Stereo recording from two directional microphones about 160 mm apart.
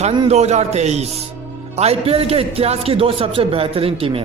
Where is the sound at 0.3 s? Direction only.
45° right (ahead or behind).